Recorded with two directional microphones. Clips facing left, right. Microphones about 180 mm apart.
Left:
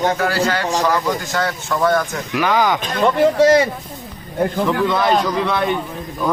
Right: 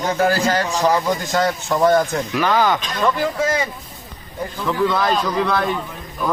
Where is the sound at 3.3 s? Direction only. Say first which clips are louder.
Left 8 dB; 75° left (ahead or behind).